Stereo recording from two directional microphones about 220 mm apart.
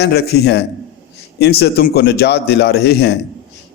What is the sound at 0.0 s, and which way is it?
A man's voice, 50° left (ahead or behind).